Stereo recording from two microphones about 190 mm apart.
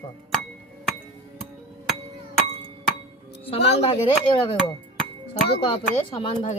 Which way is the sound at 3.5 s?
30° left (ahead or behind).